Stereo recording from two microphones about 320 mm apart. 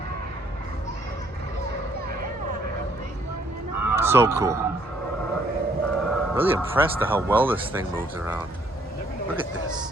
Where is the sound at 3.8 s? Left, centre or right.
Centre.